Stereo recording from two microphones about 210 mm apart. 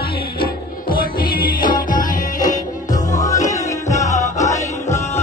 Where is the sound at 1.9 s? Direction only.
40° left (ahead or behind).